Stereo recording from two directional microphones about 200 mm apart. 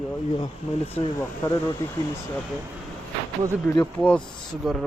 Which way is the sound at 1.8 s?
15° left (ahead or behind).